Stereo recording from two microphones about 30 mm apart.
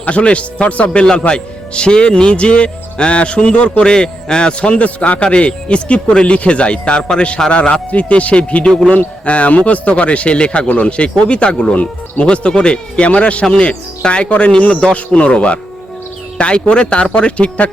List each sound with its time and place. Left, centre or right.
0.0 s speech: left
1.3 s speech: left
4.7 s speech: left
5.2 s speech: left
12.2 s speech: left
14.7 s speech: left
14.9 s speech: left